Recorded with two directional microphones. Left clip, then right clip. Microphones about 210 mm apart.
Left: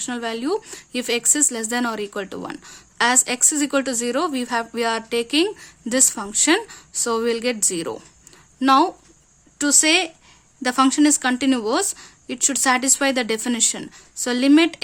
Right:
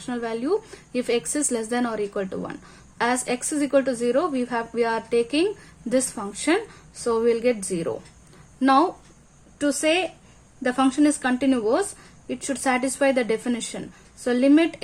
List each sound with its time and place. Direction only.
0.0 s a woman's voice: 30° left (ahead or behind)